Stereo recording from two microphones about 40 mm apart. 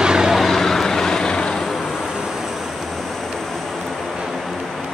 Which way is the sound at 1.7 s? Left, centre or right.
Centre.